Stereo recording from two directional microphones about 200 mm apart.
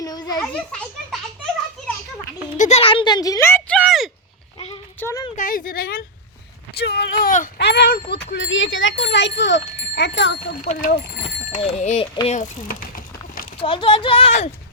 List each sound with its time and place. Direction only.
0.0 s a sound: 20° left (ahead or behind)
0.3 s a child's voice: 5° left (ahead or behind)
2.6 s speech: 35° left (ahead or behind); by 4.1 s centre (ahead or behind)
4.9 s a sound: 15° left (ahead or behind)
5.4 s speech: 45° left (ahead or behind)
8.3 s speech: 65° left (ahead or behind)
10.6 s speech: 40° left (ahead or behind)
13.6 s a child's voice: 25° left (ahead or behind)